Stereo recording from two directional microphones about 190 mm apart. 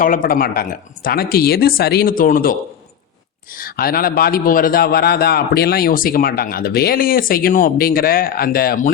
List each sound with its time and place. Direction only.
0.0 s a man's voice: 45° left (ahead or behind)